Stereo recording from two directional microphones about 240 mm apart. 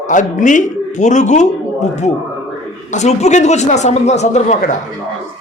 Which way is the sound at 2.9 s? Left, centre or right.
Left.